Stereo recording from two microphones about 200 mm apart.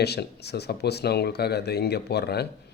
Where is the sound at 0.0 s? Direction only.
55° left (ahead or behind).